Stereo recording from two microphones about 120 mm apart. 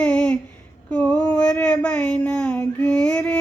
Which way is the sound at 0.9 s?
10° left (ahead or behind).